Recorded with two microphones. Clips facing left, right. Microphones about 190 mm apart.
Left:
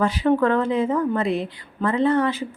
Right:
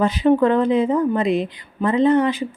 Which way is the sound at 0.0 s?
20° right (ahead or behind).